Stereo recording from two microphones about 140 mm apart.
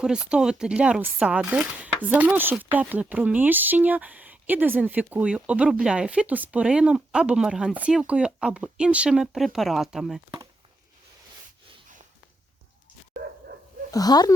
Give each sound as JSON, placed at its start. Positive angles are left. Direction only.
{"t": 0.0, "sound": "speech", "side_deg": -5}
{"t": 13.9, "sound": "speech", "side_deg": 25}